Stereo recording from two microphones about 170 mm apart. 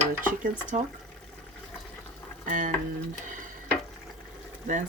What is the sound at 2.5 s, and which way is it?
Speech, 50° right (ahead or behind).